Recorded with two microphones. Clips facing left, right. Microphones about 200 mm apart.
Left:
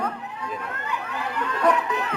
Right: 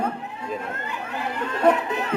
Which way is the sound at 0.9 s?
25° right (ahead or behind).